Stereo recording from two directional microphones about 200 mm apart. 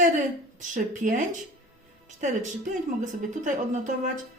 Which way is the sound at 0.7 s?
40° right (ahead or behind).